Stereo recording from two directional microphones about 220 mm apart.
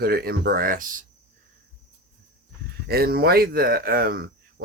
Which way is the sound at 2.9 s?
45° right (ahead or behind).